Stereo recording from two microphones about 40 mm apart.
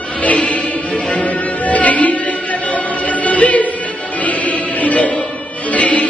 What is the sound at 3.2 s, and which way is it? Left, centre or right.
Music, left.